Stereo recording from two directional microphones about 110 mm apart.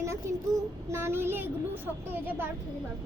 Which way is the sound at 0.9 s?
25° right (ahead or behind).